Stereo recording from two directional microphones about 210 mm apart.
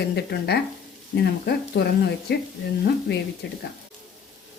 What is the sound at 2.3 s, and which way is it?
Speech, 50° left (ahead or behind).